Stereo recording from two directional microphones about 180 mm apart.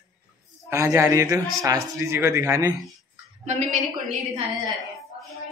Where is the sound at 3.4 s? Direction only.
40° right (ahead or behind).